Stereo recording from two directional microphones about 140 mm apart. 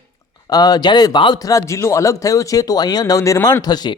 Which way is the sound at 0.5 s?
30° left (ahead or behind).